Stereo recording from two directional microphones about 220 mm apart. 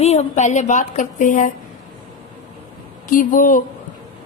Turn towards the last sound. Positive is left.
turn(degrees=35)  # may be behind; listen again after turning